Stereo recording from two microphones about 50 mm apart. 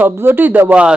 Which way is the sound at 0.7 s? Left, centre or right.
Right.